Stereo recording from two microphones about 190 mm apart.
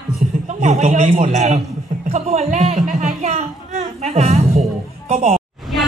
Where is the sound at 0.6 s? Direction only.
40° right (ahead or behind).